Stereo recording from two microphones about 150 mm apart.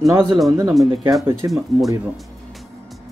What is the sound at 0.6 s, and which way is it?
Speech, 5° right (ahead or behind).